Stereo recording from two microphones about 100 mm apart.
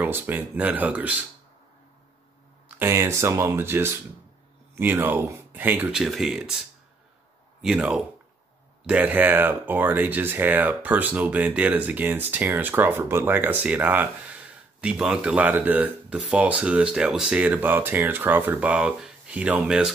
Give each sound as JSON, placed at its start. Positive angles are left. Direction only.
{"t": 0.0, "sound": "speech", "side_deg": -20}
{"t": 2.8, "sound": "speech", "side_deg": -25}
{"t": 5.9, "sound": "speech", "side_deg": -5}
{"t": 7.6, "sound": "speech", "side_deg": -5}